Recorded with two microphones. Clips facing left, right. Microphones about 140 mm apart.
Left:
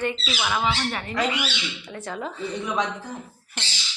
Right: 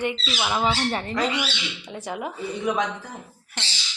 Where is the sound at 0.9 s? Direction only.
35° right (ahead or behind).